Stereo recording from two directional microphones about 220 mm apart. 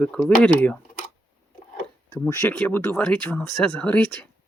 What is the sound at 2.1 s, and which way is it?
Speech, 10° left (ahead or behind).